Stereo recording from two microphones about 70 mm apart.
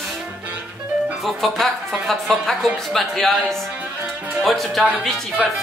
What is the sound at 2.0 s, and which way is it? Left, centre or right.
Speech, centre.